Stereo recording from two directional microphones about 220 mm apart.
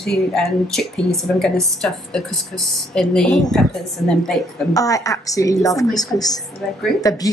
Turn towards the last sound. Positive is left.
turn(degrees=15)  # may be behind; listen again after turning